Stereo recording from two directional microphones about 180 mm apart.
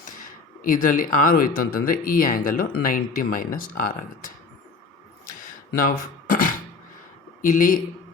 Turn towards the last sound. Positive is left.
turn(degrees=50)  # may be behind; listen again after turning